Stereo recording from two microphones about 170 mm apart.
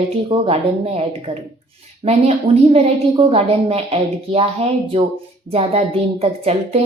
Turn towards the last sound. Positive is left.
turn(degrees=-40)  # may be behind; listen again after turning